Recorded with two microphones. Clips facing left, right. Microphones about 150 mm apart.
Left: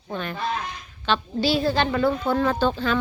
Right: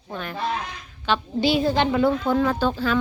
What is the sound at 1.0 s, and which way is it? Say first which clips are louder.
Speech: right 1 dB; 15° right (ahead or behind).